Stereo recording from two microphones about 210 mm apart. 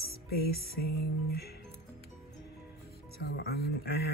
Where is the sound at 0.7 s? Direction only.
45° left (ahead or behind).